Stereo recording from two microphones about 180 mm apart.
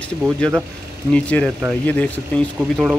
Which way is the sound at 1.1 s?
5° left (ahead or behind).